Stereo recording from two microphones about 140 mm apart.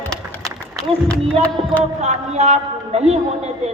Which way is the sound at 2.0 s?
55° right (ahead or behind).